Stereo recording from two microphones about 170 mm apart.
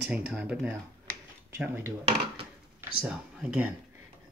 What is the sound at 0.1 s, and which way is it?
Speech, 5° right (ahead or behind).